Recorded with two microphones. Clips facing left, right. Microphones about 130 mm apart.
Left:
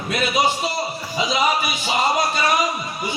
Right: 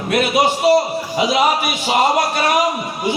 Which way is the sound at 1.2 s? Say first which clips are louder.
Right 4 dB; 65° right (ahead or behind).